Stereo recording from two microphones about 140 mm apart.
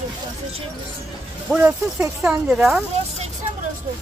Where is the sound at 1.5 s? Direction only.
10° right (ahead or behind).